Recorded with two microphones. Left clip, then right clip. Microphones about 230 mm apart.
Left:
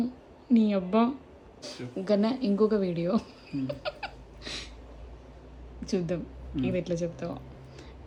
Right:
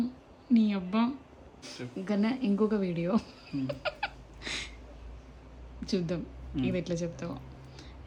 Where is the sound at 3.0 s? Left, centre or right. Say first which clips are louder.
Left 2 dB; centre.